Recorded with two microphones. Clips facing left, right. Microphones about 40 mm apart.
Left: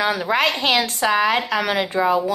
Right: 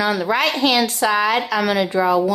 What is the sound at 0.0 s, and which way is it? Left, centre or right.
A woman's voice, left.